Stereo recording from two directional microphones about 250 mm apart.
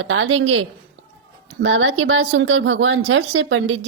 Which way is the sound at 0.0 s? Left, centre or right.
Right.